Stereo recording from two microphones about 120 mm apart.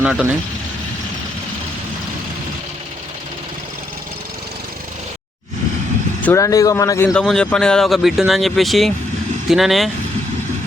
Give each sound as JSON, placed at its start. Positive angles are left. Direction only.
{"t": 0.0, "sound": "speech", "side_deg": -5}
{"t": 6.2, "sound": "speech", "side_deg": 25}
{"t": 7.1, "sound": "speech", "side_deg": 5}